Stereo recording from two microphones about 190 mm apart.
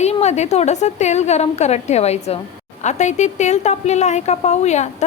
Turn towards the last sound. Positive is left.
turn(degrees=35)  # may be behind; listen again after turning